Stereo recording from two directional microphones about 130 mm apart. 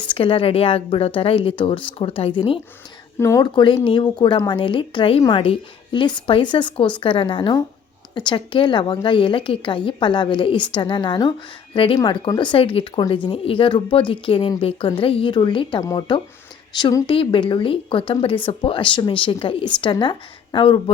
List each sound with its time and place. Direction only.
0.0 s speech: 40° left (ahead or behind)
3.2 s speech: 25° left (ahead or behind)
3.4 s speech: 35° left (ahead or behind)